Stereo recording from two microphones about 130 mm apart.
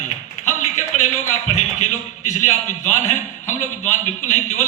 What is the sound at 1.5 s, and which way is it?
A man's voice, 65° left (ahead or behind).